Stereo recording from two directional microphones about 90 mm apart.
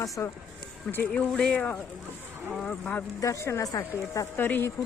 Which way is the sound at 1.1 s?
10° left (ahead or behind).